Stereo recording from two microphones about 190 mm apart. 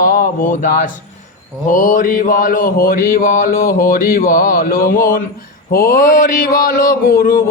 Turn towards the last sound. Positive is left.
turn(degrees=50)  # may be behind; listen again after turning